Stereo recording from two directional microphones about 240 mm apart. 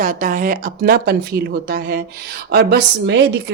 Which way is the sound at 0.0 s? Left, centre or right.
Right.